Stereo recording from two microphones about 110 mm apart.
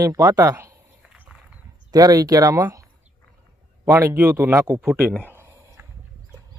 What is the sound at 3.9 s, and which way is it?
Speech, 25° right (ahead or behind).